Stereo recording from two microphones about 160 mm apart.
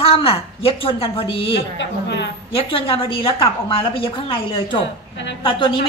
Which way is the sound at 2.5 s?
35° left (ahead or behind).